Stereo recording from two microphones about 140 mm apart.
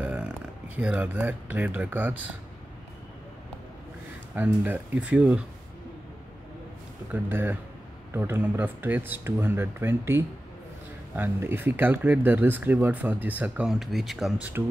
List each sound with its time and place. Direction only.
0.0 s speech: 10° right (ahead or behind)
4.4 s speech: 10° right (ahead or behind)
7.1 s speech: 15° right (ahead or behind)
14.6 s speech: 15° right (ahead or behind)